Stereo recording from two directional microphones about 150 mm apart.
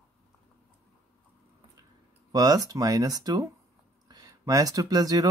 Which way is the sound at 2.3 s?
25° right (ahead or behind).